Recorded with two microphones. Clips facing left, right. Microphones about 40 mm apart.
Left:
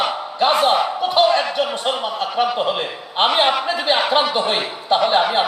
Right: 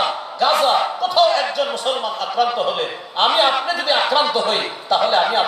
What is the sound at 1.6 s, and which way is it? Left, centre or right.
A man's voice, left.